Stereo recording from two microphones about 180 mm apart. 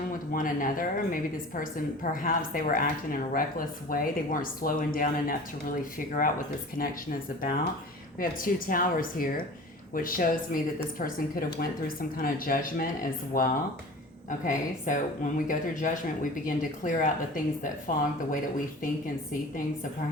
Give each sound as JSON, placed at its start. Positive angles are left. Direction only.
{"t": 0.3, "sound": "a woman's voice", "side_deg": 50}